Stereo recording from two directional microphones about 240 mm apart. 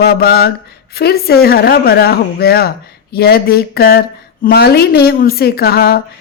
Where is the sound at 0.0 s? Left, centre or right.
Left.